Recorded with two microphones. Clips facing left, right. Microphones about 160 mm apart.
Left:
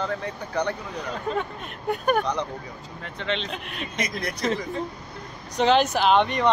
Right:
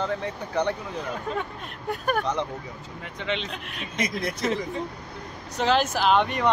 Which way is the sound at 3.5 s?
Centre (ahead or behind).